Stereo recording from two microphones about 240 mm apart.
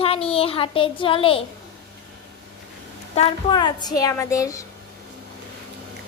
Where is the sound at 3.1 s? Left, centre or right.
Left.